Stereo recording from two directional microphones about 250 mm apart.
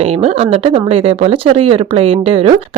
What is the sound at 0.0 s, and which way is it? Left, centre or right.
Speech, right.